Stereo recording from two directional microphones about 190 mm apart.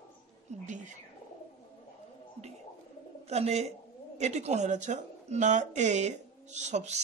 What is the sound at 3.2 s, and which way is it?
Speech, 35° right (ahead or behind).